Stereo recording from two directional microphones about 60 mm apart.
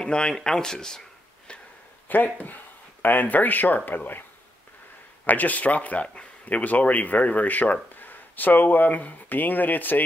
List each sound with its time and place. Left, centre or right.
0.0 s speech: centre
2.0 s speech: left
5.2 s speech: left